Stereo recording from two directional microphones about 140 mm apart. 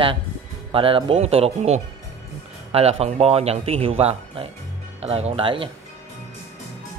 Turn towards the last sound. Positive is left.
turn(degrees=-40)  # may be behind; listen again after turning